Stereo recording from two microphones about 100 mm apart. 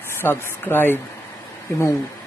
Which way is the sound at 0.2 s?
20° left (ahead or behind).